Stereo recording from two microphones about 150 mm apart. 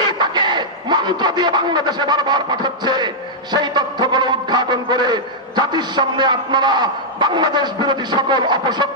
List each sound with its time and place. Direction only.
0.2 s a man's voice: 30° right (ahead or behind)